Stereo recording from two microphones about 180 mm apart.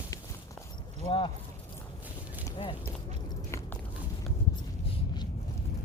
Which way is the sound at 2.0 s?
10° right (ahead or behind).